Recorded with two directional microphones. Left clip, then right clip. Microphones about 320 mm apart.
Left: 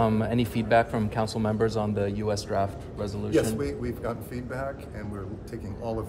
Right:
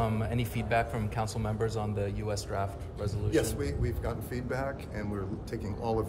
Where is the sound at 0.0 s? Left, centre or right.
Left.